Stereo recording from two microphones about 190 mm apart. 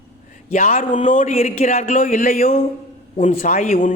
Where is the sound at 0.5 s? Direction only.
45° left (ahead or behind).